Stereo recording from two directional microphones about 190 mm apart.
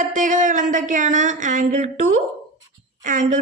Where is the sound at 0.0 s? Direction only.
40° right (ahead or behind).